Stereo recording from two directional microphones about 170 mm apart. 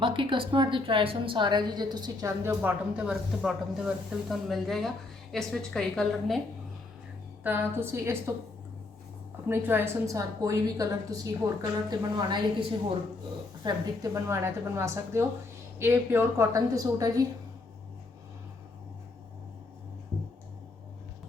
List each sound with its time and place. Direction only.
0.0 s a woman's voice: 30° right (ahead or behind); by 6.4 s centre (ahead or behind)
7.4 s a woman's voice: 10° right (ahead or behind)
9.5 s a woman's voice: 15° right (ahead or behind)